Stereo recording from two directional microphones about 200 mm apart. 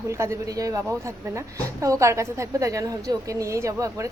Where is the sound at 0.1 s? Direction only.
15° right (ahead or behind).